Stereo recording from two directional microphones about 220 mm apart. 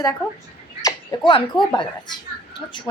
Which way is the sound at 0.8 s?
15° left (ahead or behind).